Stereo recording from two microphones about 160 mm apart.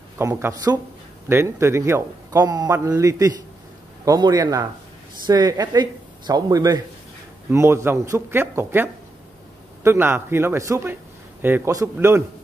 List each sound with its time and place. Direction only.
0.2 s a man's voice: 20° right (ahead or behind)